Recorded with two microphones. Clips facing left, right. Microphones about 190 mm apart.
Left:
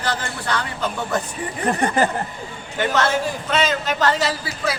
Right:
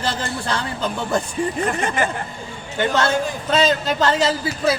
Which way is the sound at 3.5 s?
30° right (ahead or behind).